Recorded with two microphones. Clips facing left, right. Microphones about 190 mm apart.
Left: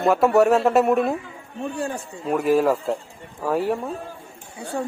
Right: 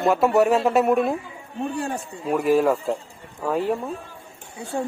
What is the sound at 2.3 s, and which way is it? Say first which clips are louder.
A man's voice: even; centre (ahead or behind).